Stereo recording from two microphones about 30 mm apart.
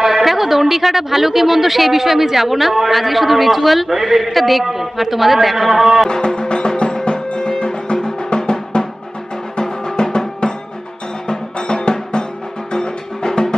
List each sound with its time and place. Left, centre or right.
0.0 s speech: centre
6.0 s music: left